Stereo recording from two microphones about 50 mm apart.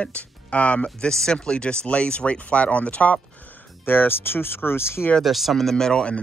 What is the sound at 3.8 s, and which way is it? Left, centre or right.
Speech, left.